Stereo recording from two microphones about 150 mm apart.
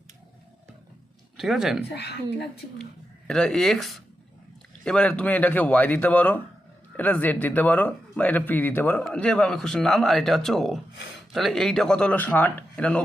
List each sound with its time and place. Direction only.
1.4 s speech: centre (ahead or behind)
1.9 s speech: 90° left
3.2 s speech: 5° left (ahead or behind)